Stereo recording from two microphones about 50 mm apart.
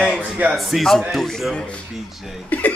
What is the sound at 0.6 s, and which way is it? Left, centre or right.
A man's voice, centre.